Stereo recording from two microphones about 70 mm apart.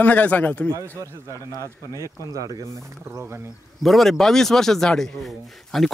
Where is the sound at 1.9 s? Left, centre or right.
Left.